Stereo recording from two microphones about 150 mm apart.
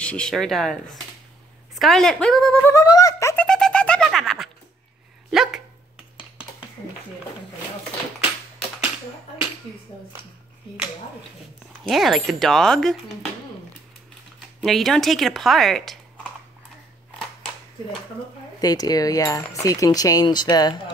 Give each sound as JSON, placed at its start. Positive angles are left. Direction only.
{"t": 0.0, "sound": "speech", "side_deg": 5}
{"t": 2.7, "sound": "speech", "side_deg": 20}
{"t": 3.4, "sound": "a sound", "side_deg": 5}
{"t": 5.3, "sound": "dog", "side_deg": -5}
{"t": 11.9, "sound": "speech", "side_deg": 0}
{"t": 14.6, "sound": "speech", "side_deg": 0}
{"t": 18.6, "sound": "speech", "side_deg": 25}